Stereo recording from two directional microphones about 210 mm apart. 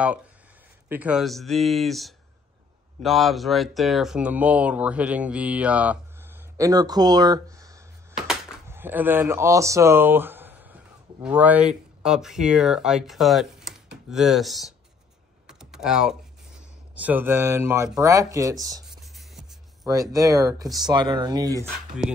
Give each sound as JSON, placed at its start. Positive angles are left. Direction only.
{"t": 0.8, "sound": "speech", "side_deg": -5}
{"t": 6.5, "sound": "speech", "side_deg": -15}
{"t": 15.4, "sound": "typing", "side_deg": -5}
{"t": 16.9, "sound": "speech", "side_deg": -10}
{"t": 18.9, "sound": "music", "side_deg": 0}
{"t": 19.8, "sound": "speech", "side_deg": -15}